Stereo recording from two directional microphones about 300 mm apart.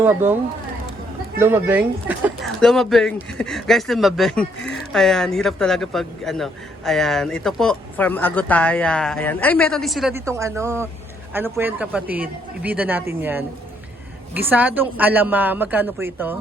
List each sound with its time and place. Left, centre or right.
0.0 s speech: centre
1.4 s speech: centre